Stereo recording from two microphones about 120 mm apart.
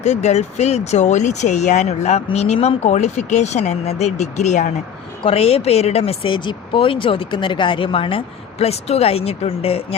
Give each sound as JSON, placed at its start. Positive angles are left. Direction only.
{"t": 0.0, "sound": "speech", "side_deg": 65}
{"t": 5.2, "sound": "speech", "side_deg": 55}